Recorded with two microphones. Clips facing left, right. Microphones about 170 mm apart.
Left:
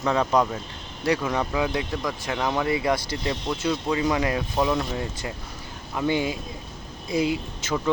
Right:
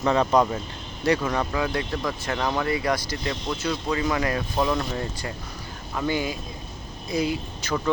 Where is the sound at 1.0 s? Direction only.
10° left (ahead or behind).